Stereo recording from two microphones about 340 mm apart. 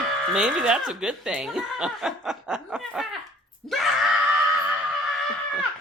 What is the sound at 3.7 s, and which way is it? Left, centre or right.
Screaming, centre.